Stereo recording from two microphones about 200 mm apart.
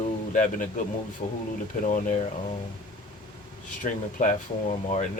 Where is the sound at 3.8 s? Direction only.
40° left (ahead or behind).